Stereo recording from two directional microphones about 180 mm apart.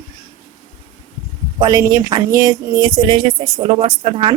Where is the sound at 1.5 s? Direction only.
20° right (ahead or behind).